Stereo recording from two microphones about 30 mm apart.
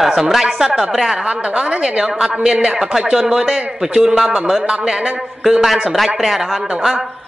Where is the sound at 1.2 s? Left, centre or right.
Right; by 3.6 s centre.